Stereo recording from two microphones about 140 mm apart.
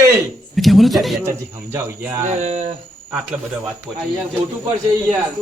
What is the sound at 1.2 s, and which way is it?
Speech, 20° right (ahead or behind).